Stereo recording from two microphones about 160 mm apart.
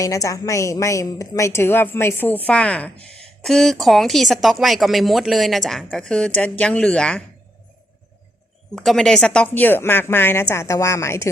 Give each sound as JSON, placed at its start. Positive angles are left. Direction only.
{"t": 0.0, "sound": "a woman's voice", "side_deg": 20}
{"t": 8.7, "sound": "a woman's voice", "side_deg": 0}